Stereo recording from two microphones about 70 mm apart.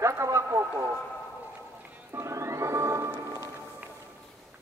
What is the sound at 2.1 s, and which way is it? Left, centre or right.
Music, right.